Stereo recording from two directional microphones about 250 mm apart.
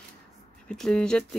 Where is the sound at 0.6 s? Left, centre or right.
Centre.